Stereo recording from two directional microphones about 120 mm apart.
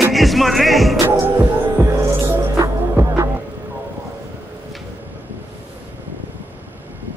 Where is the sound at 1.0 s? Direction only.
20° right (ahead or behind).